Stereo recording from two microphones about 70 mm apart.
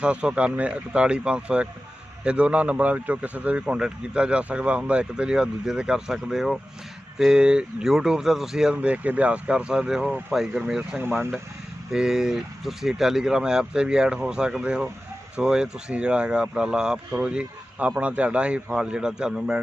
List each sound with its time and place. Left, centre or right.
0.0 s a man's voice: centre
8.7 s a man's voice: centre
10.9 s speech: right
11.9 s a man's voice: centre